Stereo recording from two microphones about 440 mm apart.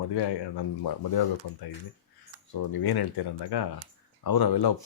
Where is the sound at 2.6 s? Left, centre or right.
Left.